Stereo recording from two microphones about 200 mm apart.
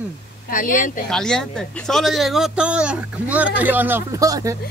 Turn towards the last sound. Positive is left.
turn(degrees=-15)  # may be behind; listen again after turning